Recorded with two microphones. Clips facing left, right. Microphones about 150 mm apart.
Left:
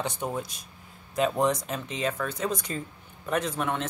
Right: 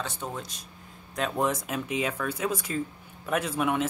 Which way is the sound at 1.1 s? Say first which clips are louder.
Left 3 dB; centre (ahead or behind).